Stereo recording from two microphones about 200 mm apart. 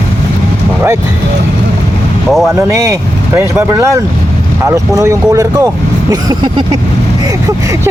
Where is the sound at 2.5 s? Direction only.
15° right (ahead or behind).